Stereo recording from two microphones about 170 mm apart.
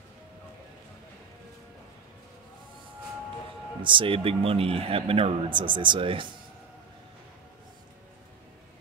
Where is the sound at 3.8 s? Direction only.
30° right (ahead or behind).